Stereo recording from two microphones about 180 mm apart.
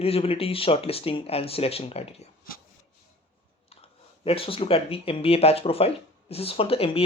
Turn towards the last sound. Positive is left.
turn(degrees=30)  # may be behind; listen again after turning